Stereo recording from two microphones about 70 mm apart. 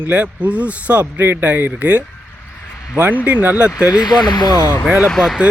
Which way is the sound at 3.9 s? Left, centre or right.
Left.